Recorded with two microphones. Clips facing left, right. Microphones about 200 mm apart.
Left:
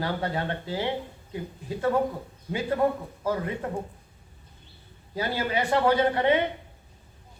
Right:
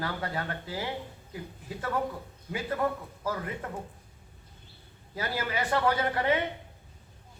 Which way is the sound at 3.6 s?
30° left (ahead or behind).